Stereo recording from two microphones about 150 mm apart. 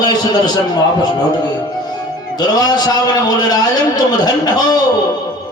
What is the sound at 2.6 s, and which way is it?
A man's voice, 25° left (ahead or behind).